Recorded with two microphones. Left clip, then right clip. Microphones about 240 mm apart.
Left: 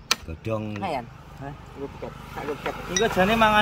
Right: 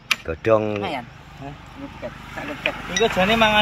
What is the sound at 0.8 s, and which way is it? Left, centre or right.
Speech, left.